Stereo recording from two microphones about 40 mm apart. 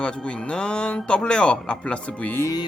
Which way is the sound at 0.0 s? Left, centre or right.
Left.